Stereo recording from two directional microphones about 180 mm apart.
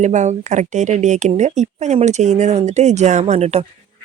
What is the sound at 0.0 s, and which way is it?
Speech, 40° right (ahead or behind).